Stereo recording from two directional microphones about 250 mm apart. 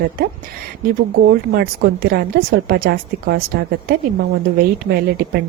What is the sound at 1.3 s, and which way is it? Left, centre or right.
A woman's voice, right.